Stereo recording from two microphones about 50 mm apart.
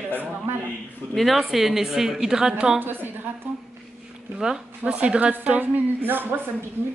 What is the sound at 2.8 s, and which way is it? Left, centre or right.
Speech, right.